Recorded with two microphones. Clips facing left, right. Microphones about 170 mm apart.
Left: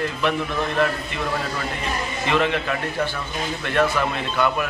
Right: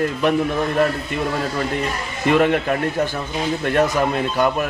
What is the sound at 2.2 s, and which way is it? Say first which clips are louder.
A man's voice: right 6 dB; 50° right (ahead or behind).